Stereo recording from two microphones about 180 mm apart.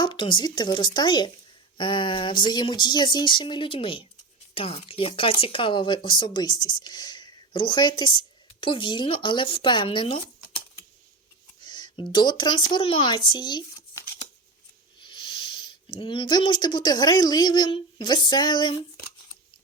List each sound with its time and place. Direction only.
0.0 s speech: 25° left (ahead or behind)
11.6 s a sound: 25° left (ahead or behind)
12.1 s speech: 25° left (ahead or behind)
15.0 s speech: 25° left (ahead or behind)